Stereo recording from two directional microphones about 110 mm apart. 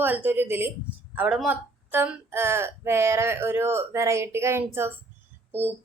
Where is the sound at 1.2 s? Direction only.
10° right (ahead or behind).